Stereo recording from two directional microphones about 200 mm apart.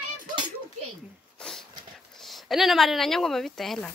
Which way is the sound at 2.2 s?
Centre (ahead or behind).